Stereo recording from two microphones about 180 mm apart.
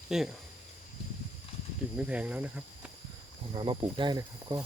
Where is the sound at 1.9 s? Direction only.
5° right (ahead or behind).